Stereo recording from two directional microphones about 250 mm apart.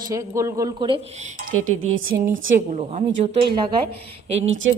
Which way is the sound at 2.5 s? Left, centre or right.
Right.